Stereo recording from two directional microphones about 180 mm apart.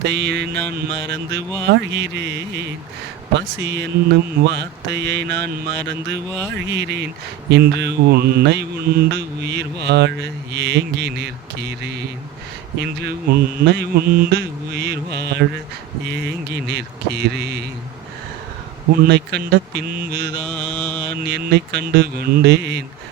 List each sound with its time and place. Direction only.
0.0 s mantra: 70° right (ahead or behind)
19.0 s mantra: 65° right (ahead or behind)
20.4 s mantra: 5° left (ahead or behind)
21.2 s mantra: 70° right (ahead or behind)